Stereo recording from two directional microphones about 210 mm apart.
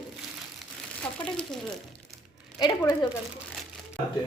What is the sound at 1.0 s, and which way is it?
Speech, 5° left (ahead or behind).